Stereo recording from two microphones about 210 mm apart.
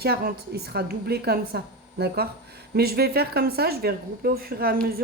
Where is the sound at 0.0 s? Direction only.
45° right (ahead or behind).